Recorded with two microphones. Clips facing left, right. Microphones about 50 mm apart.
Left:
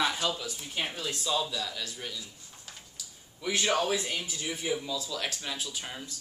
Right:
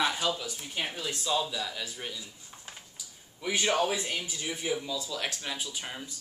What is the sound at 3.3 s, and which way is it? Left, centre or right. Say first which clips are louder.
Speech: even; centre.